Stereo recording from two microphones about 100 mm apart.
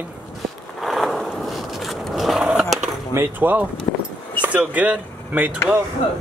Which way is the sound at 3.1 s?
20° right (ahead or behind).